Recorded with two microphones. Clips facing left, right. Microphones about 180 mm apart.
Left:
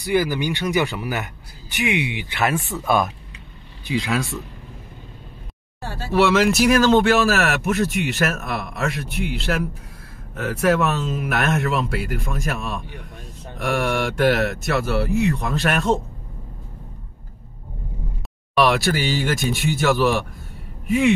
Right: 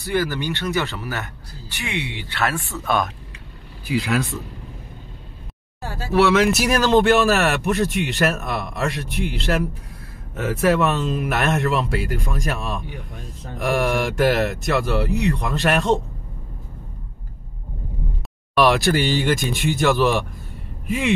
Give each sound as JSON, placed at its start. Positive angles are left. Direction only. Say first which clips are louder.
{"t": 0.0, "sound": "speech", "louder": "left 2 dB", "side_deg": 15}
{"t": 3.8, "sound": "speech", "louder": "right 1 dB", "side_deg": 0}
{"t": 6.1, "sound": "speech", "louder": "even", "side_deg": 0}
{"t": 13.8, "sound": "speech", "louder": "left 1 dB", "side_deg": 0}
{"t": 18.5, "sound": "speech", "louder": "right 1 dB", "side_deg": 0}